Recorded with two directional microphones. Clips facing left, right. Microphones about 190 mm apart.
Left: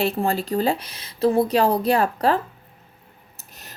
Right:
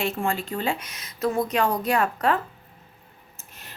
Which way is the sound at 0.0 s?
35° left (ahead or behind).